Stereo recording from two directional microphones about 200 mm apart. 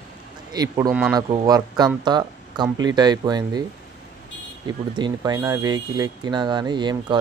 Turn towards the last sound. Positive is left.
turn(degrees=-20)  # may be behind; listen again after turning